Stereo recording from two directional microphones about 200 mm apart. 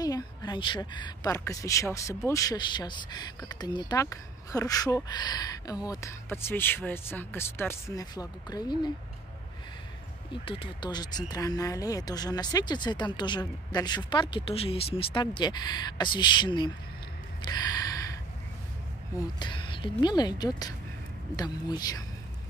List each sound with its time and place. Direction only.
0.0 s a woman's voice: 20° left (ahead or behind)
10.3 s a woman's voice: 25° left (ahead or behind)
17.5 s gasp: 20° left (ahead or behind)
19.4 s a woman's voice: 25° left (ahead or behind)